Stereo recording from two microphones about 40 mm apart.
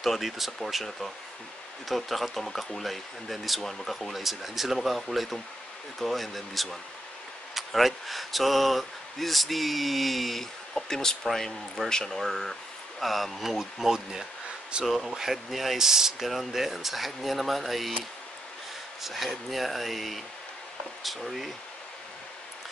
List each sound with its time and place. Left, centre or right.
0.0 s speech: centre
1.9 s speech: centre
14.7 s speech: right
15.0 s speech: centre
19.0 s speech: centre